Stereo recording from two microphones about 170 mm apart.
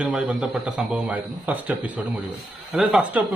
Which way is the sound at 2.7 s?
5° right (ahead or behind).